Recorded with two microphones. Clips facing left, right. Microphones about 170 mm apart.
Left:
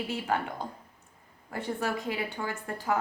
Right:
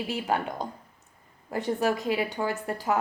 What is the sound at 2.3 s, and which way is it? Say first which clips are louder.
Speech: right 6 dB; 40° right (ahead or behind).